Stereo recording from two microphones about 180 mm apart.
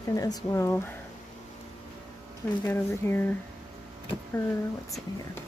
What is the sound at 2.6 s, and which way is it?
Speech, 10° left (ahead or behind).